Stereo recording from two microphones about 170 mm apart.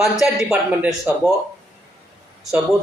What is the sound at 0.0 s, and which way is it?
A man's voice, 5° right (ahead or behind).